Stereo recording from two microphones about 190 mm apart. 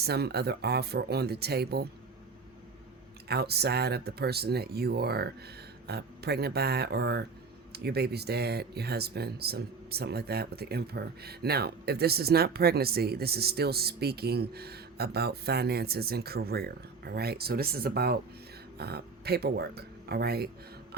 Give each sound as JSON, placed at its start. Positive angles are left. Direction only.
{"t": 0.0, "sound": "speech", "side_deg": -60}
{"t": 3.2, "sound": "speech", "side_deg": -55}